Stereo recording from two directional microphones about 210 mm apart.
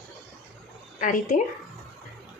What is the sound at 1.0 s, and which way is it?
Speech, 40° left (ahead or behind).